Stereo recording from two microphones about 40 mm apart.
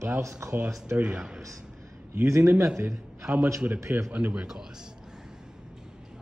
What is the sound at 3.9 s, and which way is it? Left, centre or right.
Speech, right.